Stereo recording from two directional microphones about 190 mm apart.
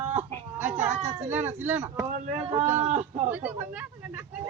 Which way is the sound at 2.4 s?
35° right (ahead or behind).